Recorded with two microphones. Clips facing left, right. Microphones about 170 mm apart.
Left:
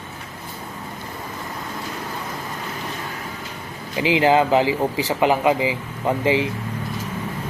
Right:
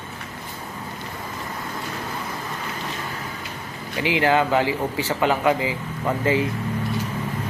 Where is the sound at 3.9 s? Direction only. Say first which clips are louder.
Left 3 dB; 20° left (ahead or behind).